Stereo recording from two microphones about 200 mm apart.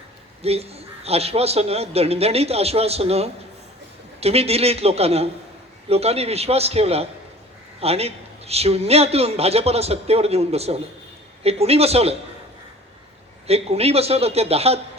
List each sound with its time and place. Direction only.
0.4 s a man's voice: 30° right (ahead or behind)
13.5 s a man's voice: 30° right (ahead or behind)